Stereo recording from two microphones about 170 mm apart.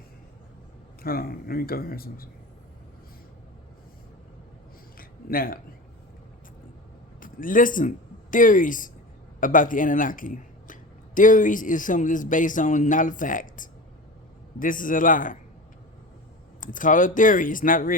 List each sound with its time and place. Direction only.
1.0 s speech: 60° left (ahead or behind)
4.9 s a sound: 60° left (ahead or behind)
7.2 s speech: 55° left (ahead or behind)
16.6 s speech: 50° left (ahead or behind)